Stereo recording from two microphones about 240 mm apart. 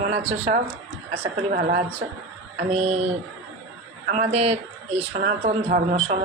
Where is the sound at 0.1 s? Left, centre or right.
Right.